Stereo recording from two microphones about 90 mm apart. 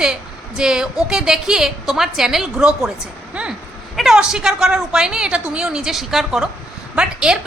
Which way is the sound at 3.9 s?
Centre (ahead or behind).